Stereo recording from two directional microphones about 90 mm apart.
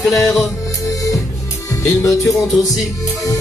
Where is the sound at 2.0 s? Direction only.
35° left (ahead or behind).